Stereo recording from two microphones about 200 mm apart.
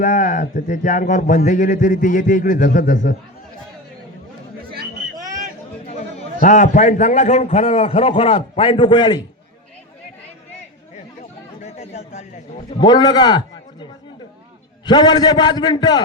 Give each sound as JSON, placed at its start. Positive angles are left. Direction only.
{"t": 0.0, "sound": "a man's voice", "side_deg": 40}
{"t": 4.7, "sound": "hubbub", "side_deg": -50}
{"t": 5.8, "sound": "chatter", "side_deg": 35}
{"t": 6.4, "sound": "a man's voice", "side_deg": 40}
{"t": 11.6, "sound": "chatter", "side_deg": 35}
{"t": 12.7, "sound": "a man's voice", "side_deg": 20}
{"t": 14.8, "sound": "a man's voice", "side_deg": 20}